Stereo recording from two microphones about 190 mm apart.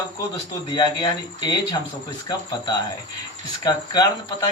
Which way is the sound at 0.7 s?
25° left (ahead or behind).